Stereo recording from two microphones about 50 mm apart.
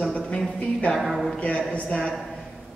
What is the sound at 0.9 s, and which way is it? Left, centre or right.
Speech, centre.